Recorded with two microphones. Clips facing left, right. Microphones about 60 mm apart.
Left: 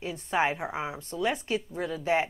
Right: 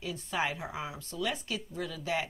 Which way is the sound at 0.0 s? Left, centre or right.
Left.